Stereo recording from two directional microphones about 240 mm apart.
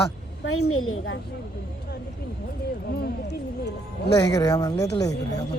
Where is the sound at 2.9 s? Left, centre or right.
Left.